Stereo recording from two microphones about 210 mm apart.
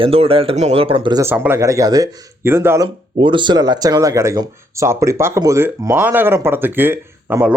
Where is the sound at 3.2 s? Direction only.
20° right (ahead or behind).